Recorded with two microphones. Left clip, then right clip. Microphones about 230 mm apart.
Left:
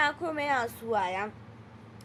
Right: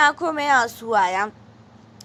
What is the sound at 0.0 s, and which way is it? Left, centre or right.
A woman's voice, centre.